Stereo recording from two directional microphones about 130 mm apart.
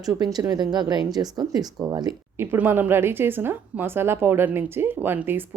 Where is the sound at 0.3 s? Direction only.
30° right (ahead or behind).